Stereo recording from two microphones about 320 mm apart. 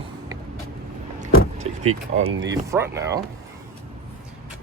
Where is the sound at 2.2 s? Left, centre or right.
Centre.